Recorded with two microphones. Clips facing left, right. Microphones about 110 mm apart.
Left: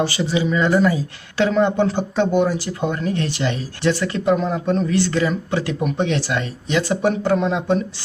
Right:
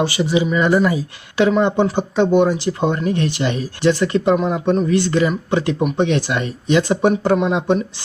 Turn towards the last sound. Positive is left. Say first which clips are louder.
# right 2 dB
turn(degrees=-20)  # may be behind; listen again after turning